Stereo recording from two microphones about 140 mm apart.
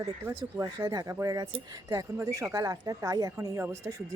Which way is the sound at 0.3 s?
20° right (ahead or behind).